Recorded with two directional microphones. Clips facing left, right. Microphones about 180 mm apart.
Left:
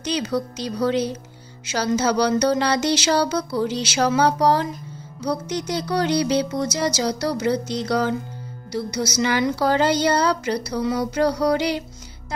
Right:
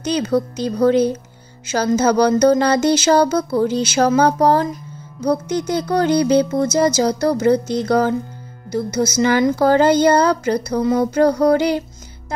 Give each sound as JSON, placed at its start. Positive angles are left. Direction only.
{"t": 0.0, "sound": "speech", "side_deg": -50}